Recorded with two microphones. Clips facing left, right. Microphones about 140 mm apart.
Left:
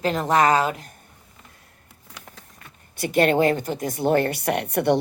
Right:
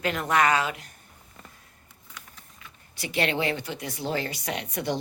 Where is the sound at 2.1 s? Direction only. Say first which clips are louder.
Left 4 dB; 80° left.